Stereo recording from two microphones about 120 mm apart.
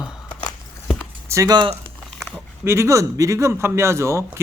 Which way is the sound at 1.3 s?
30° right (ahead or behind).